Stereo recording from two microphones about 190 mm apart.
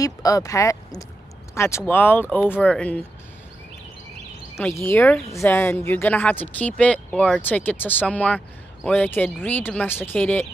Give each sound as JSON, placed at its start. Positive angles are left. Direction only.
{"t": 0.0, "sound": "speech", "side_deg": 20}
{"t": 4.6, "sound": "speech", "side_deg": 15}